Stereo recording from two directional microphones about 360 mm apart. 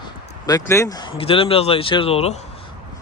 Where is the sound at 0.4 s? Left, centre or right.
Centre.